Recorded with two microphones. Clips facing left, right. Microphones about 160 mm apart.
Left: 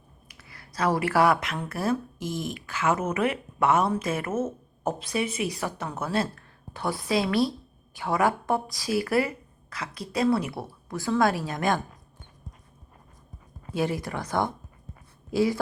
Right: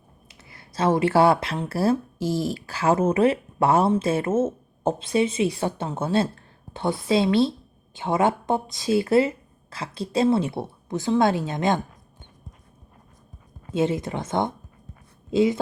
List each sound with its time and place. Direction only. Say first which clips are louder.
0.3 s speech: right 1 dB; 25° right (ahead or behind)
13.7 s speech: right 4 dB; 20° right (ahead or behind)